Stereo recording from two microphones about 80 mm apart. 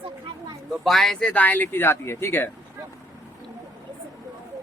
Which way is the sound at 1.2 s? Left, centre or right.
Centre.